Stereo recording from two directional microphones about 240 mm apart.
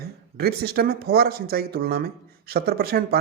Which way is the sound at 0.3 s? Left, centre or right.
Right.